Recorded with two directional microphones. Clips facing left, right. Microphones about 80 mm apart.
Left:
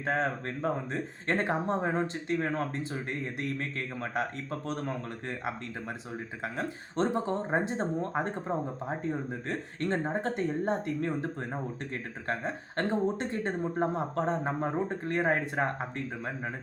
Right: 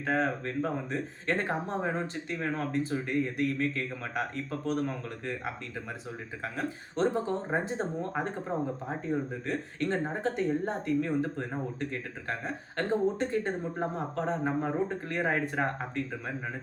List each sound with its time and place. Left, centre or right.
0.0 s speech: left
6.4 s speech: left